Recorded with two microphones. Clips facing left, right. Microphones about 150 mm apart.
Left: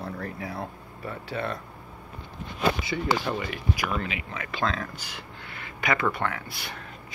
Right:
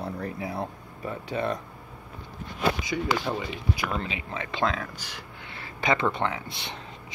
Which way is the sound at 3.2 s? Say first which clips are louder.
Even; 15° right (ahead or behind).